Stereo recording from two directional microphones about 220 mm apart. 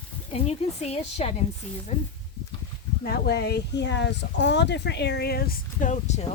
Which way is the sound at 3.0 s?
45° left (ahead or behind).